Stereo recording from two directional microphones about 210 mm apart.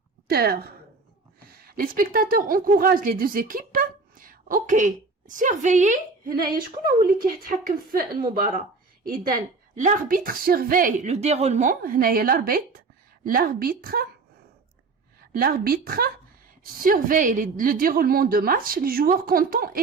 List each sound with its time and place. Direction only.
0.3 s a woman's voice: 45° right (ahead or behind)
15.4 s a woman's voice: 45° right (ahead or behind)